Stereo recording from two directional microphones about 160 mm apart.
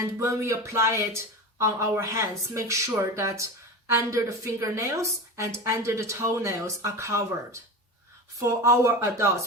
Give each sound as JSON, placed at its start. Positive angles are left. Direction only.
{"t": 0.2, "sound": "speech", "side_deg": -20}